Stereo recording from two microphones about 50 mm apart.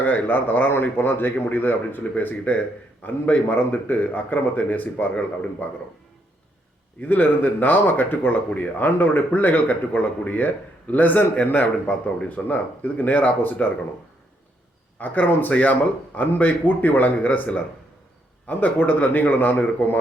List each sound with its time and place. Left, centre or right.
0.0 s speech: left
7.0 s speech: left
14.9 s speech: left